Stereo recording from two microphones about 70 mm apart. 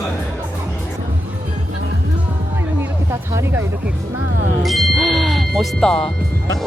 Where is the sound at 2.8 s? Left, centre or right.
Right.